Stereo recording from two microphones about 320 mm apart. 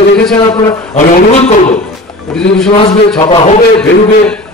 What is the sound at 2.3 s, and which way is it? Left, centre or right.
Speech, centre.